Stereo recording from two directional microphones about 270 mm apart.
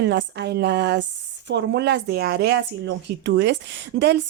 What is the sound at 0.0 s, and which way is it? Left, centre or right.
A woman's voice, right.